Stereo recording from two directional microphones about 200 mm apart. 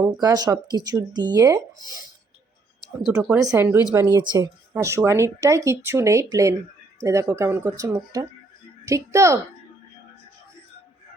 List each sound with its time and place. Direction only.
0.0 s speech: 20° right (ahead or behind)
3.2 s speech: 5° right (ahead or behind)